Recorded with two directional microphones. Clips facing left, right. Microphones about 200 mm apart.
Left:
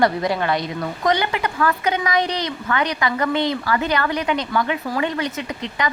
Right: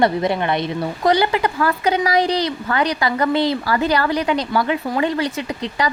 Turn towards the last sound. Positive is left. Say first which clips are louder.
# right 3 dB
turn(degrees=-35)  # may be behind; listen again after turning